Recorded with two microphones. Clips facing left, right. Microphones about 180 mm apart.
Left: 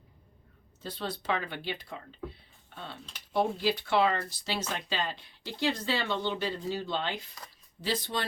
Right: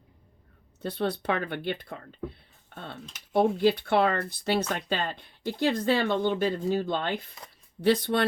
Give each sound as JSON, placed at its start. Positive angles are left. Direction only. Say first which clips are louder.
{"t": 0.8, "sound": "speech", "louder": "right 8 dB", "side_deg": -60}